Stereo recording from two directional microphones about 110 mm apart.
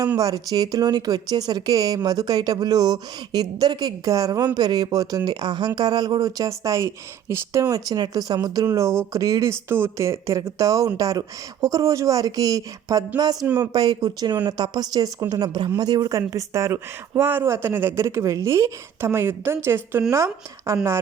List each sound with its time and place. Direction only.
0.2 s speech: 35° right (ahead or behind)